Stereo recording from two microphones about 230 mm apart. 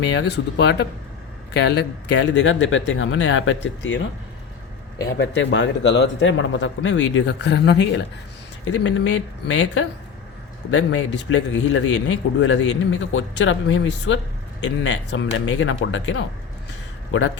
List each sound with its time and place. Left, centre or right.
0.1 s a man's voice: left
5.2 s a man's voice: left